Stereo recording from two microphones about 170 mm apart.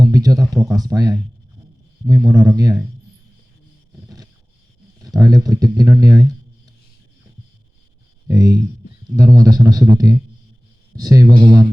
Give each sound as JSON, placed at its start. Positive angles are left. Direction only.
{"t": 0.0, "sound": "speech", "side_deg": -20}
{"t": 5.0, "sound": "speech", "side_deg": -20}
{"t": 8.3, "sound": "speech", "side_deg": -20}